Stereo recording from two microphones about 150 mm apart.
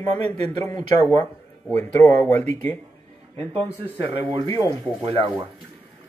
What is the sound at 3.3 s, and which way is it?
Speech, 40° right (ahead or behind).